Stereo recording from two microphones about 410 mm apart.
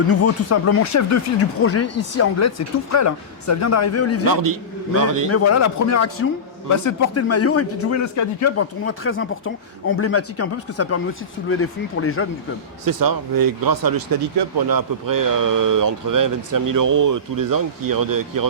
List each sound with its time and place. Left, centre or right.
0.1 s speech: left
4.9 s speech: right
5.3 s speech: left
12.8 s speech: right